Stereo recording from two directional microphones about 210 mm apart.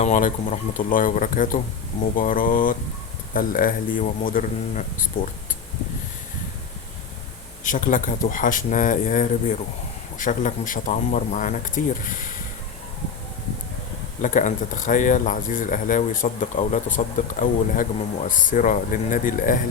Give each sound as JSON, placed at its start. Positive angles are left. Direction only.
{"t": 0.0, "sound": "speech", "side_deg": 35}
{"t": 7.6, "sound": "speech", "side_deg": 40}
{"t": 14.2, "sound": "speech", "side_deg": 35}